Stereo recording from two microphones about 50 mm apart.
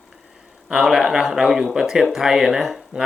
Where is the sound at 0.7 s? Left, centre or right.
Centre.